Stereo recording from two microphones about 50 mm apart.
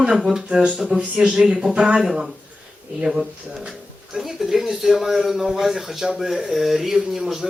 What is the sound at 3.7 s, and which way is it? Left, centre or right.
Speech, centre.